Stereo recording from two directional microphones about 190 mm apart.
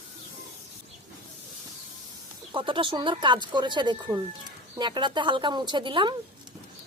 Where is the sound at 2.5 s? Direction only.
25° right (ahead or behind).